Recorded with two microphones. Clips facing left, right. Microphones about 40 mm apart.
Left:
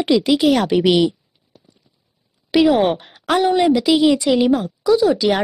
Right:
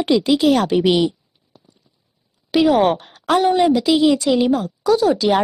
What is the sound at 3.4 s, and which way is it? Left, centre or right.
A woman's voice, centre.